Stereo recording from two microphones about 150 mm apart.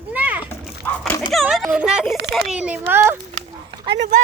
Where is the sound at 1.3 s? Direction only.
Centre (ahead or behind); by 3.1 s 15° right (ahead or behind).